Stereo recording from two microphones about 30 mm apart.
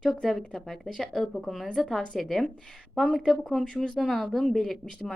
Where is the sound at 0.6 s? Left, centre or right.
Centre.